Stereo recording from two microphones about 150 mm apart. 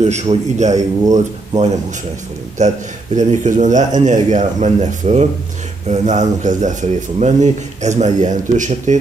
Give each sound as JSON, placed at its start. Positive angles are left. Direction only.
{"t": 0.0, "sound": "speech", "side_deg": -45}